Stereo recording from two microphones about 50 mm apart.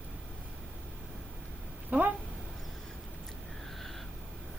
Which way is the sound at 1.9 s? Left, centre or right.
Right.